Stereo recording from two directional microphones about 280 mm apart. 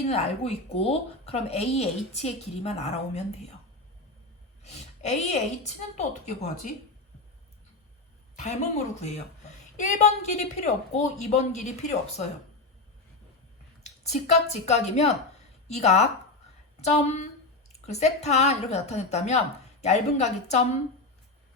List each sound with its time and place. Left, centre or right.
0.0 s a woman's voice: left
4.6 s a woman's voice: left
8.4 s a woman's voice: left
13.8 s a woman's voice: left